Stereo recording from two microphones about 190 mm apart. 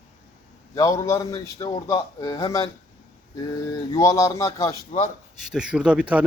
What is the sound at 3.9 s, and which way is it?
Speech, 15° left (ahead or behind).